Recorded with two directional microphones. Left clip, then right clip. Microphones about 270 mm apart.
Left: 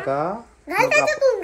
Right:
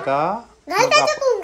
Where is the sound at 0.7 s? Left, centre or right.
Right.